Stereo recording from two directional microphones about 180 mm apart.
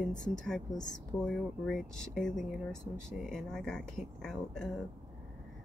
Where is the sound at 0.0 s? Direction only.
5° left (ahead or behind).